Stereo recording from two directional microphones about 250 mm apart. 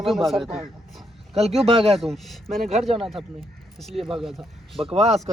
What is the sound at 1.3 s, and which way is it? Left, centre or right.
Speech, right.